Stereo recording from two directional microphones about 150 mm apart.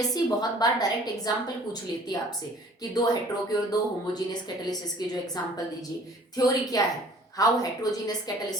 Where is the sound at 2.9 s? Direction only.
25° left (ahead or behind).